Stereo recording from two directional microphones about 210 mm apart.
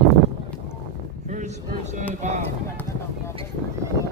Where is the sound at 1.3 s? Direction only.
35° right (ahead or behind).